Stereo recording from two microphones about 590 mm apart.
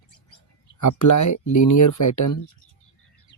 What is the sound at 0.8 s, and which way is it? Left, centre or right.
Speech, left.